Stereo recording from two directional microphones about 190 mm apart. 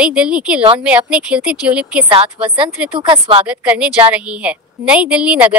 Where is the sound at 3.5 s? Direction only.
5° right (ahead or behind).